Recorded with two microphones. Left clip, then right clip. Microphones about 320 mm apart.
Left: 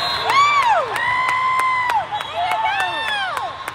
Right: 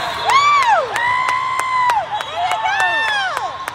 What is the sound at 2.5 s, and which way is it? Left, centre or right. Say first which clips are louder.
Run: right 4 dB; right.